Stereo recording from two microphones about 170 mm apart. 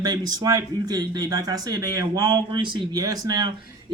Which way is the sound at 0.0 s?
25° right (ahead or behind).